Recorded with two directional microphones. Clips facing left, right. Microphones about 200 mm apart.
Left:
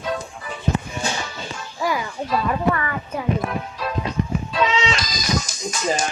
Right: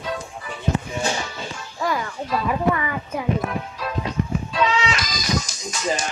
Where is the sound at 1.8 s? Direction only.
5° left (ahead or behind).